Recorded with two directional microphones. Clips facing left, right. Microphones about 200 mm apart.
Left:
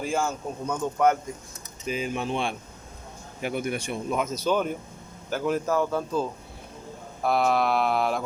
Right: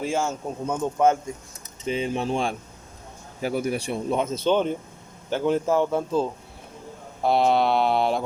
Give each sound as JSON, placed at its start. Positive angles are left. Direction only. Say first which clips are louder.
{"t": 0.0, "sound": "speech", "louder": "right 2 dB", "side_deg": -25}